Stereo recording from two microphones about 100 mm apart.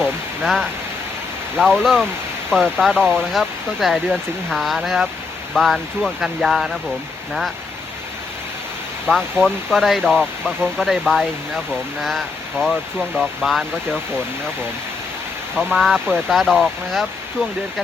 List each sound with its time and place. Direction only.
0.0 s speech: 5° left (ahead or behind)
9.1 s speech: 20° right (ahead or behind)
9.4 s speech: 5° left (ahead or behind)
15.5 s speech: 5° left (ahead or behind)